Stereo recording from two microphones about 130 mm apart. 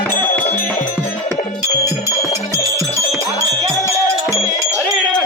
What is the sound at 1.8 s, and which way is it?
Music, 25° left (ahead or behind).